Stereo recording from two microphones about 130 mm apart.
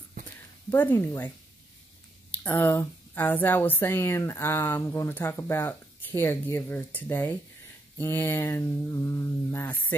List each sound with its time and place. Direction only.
0.7 s speech: 15° left (ahead or behind)
2.3 s speech: 15° left (ahead or behind)